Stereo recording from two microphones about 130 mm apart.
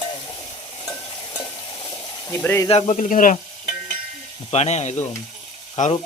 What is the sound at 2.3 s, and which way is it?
Speech, 15° left (ahead or behind).